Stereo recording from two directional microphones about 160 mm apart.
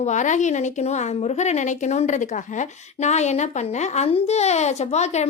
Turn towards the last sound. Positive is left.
turn(degrees=45)  # may be behind; listen again after turning